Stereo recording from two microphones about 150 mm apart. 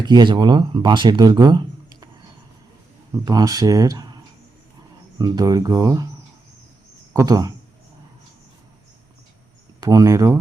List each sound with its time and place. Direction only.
0.0 s speech: 30° right (ahead or behind)
3.2 s speech: 25° right (ahead or behind)
7.1 s speech: 25° right (ahead or behind)
9.8 s speech: 25° right (ahead or behind)